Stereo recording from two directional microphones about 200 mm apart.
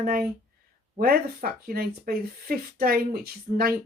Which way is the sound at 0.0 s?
45° right (ahead or behind).